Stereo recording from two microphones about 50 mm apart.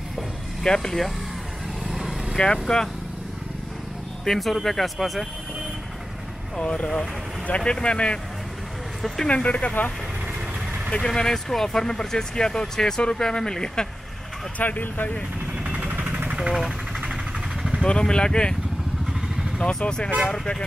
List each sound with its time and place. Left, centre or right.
0.7 s speech: centre
1.9 s vehicle: centre
2.3 s speech: centre
4.2 s speech: centre
6.6 s speech: centre
7.4 s speech: left
9.0 s speech: centre
9.3 s speech: left
10.9 s speech: centre
14.6 s speech: left
15.6 s vehicle: right
16.3 s speech: centre
17.8 s speech: centre
19.6 s speech: centre